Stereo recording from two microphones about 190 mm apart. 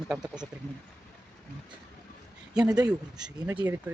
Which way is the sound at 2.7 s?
20° right (ahead or behind).